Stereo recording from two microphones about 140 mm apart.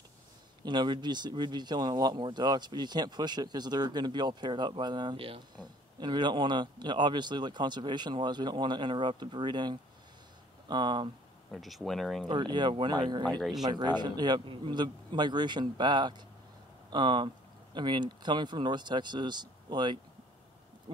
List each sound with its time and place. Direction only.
0.7 s speech: 35° right (ahead or behind)
11.5 s speech: centre (ahead or behind)
12.3 s speech: 30° right (ahead or behind)
13.4 s speech: centre (ahead or behind)
13.7 s speech: 30° right (ahead or behind)